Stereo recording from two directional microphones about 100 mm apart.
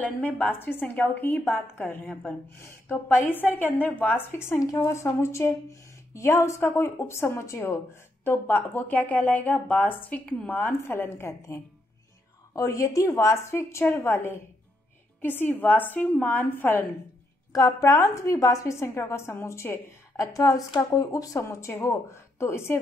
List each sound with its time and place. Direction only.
0.0 s a woman's voice: 15° left (ahead or behind)
17.5 s a woman's voice: 40° left (ahead or behind)